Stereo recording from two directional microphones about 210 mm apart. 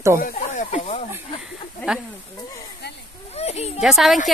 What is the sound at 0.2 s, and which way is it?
Snake, 35° left (ahead or behind).